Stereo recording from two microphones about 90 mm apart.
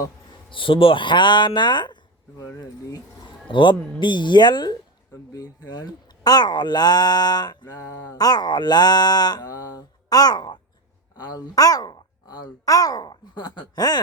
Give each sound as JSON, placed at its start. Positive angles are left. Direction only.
{"t": 0.5, "sound": "speech", "side_deg": 75}
{"t": 3.5, "sound": "speech", "side_deg": 65}